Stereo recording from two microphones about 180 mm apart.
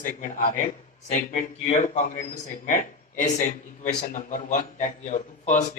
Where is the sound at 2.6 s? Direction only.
45° left (ahead or behind).